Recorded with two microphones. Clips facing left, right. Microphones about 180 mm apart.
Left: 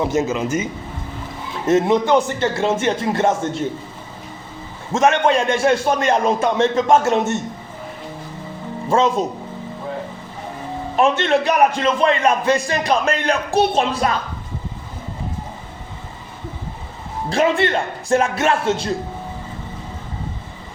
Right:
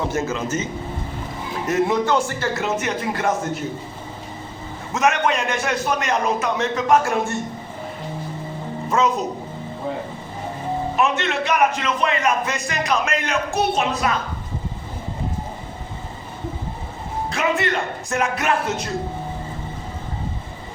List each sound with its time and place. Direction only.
0.0 s a man's voice: 20° left (ahead or behind)
4.9 s a man's voice: 30° left (ahead or behind)
8.9 s a man's voice: 30° left (ahead or behind)
10.9 s a man's voice: 30° left (ahead or behind)
17.2 s a man's voice: 30° left (ahead or behind)